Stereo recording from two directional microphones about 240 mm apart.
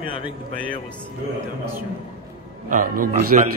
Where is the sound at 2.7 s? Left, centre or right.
Right.